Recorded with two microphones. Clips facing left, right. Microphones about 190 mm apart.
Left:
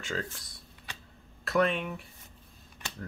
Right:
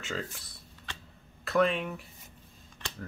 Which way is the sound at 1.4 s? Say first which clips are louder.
Right 1 dB; centre (ahead or behind).